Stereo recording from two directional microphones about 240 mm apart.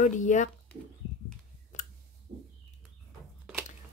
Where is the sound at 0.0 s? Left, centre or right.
Left.